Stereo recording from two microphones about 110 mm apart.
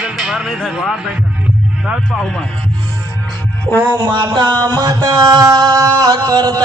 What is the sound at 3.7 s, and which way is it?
Music, 25° right (ahead or behind).